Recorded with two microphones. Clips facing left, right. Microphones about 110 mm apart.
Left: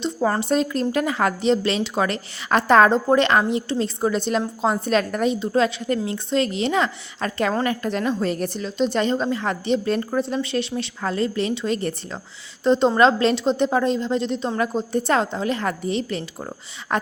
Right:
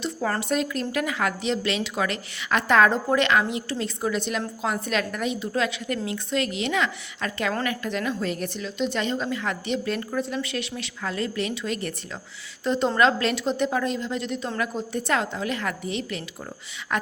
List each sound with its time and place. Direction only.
0.0 s a woman's voice: 20° left (ahead or behind)